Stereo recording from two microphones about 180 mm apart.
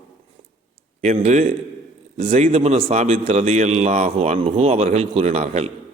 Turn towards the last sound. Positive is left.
turn(degrees=-35)  # may be behind; listen again after turning